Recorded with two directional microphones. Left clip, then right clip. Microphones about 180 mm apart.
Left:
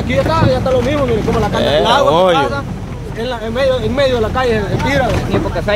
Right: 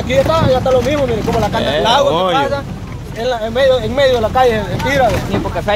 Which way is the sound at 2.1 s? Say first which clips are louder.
Left 3 dB; 10° left (ahead or behind).